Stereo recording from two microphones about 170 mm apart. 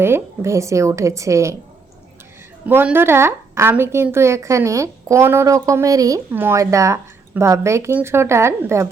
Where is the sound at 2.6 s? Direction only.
10° right (ahead or behind).